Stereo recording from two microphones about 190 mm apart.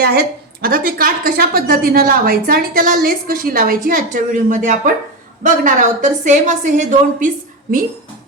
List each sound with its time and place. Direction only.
0.0 s a woman's voice: 55° right (ahead or behind)